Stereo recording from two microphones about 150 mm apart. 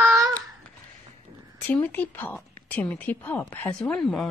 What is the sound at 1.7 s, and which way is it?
A woman's voice, 10° left (ahead or behind).